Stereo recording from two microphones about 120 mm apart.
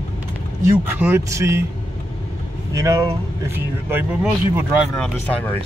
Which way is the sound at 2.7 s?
30° right (ahead or behind).